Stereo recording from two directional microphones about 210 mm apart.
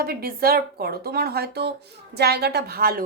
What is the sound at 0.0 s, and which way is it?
A woman's voice, 45° right (ahead or behind).